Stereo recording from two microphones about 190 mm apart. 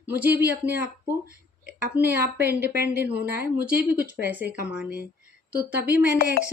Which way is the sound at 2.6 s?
55° right (ahead or behind).